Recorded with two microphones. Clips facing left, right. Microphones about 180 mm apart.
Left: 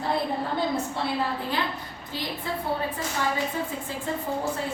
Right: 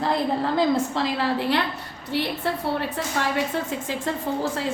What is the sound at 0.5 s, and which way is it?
A woman's voice, 90° right.